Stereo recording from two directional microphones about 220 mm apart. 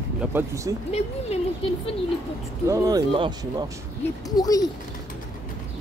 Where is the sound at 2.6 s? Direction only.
15° right (ahead or behind).